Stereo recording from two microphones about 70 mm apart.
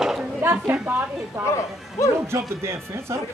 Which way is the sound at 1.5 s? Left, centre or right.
Left.